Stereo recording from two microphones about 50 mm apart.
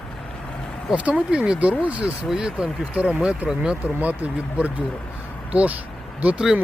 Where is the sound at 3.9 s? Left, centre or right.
Right.